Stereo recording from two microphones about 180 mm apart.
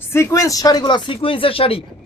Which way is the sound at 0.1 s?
15° left (ahead or behind).